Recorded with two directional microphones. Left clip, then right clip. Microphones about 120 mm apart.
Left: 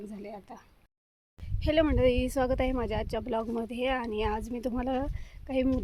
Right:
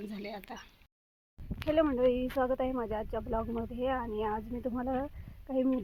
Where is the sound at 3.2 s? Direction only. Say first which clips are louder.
Left 3 dB; 35° left (ahead or behind).